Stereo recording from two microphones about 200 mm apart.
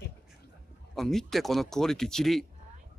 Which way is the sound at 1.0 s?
Centre (ahead or behind).